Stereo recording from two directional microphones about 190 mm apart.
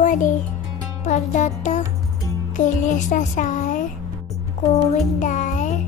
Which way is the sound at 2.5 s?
40° left (ahead or behind).